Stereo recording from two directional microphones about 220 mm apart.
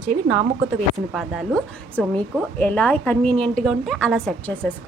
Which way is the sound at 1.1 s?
Centre (ahead or behind).